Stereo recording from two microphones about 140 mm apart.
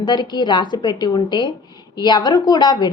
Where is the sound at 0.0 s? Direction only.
30° left (ahead or behind).